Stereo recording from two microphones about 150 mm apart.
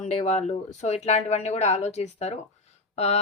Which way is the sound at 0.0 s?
50° left (ahead or behind).